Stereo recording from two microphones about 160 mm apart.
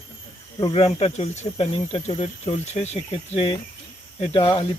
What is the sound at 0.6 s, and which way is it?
Speech, 30° left (ahead or behind).